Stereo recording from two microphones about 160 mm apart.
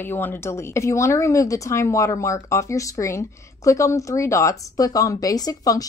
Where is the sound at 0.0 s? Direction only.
15° left (ahead or behind).